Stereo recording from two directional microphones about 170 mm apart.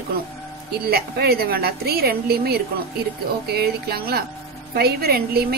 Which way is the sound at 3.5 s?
65° right (ahead or behind).